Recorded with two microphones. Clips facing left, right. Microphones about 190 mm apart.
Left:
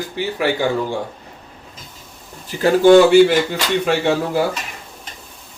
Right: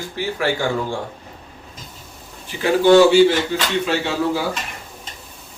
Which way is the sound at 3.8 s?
55° left (ahead or behind).